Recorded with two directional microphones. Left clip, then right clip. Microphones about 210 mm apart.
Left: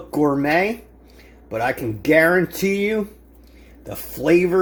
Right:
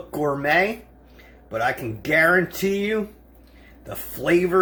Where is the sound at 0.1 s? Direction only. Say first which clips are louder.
Left 3 dB; 30° left (ahead or behind).